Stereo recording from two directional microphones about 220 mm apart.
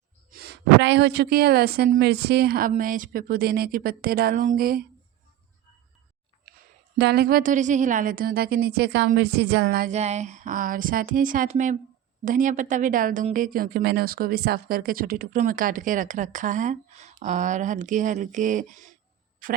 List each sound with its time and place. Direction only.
0.3 s a woman's voice: 45° right (ahead or behind)
6.5 s a sound: 45° right (ahead or behind)
7.0 s speech: 45° right (ahead or behind)